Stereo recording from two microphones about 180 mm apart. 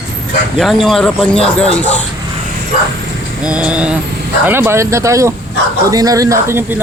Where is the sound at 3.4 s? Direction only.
5° right (ahead or behind).